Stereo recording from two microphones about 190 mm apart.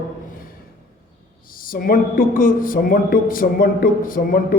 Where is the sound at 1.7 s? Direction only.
50° left (ahead or behind).